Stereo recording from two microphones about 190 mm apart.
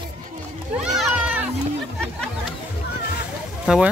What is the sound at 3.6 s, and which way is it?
Speech, 5° right (ahead or behind).